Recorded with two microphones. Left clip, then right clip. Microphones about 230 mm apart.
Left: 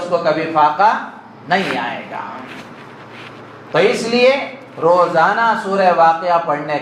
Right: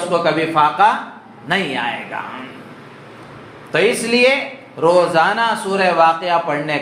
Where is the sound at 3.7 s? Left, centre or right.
Right.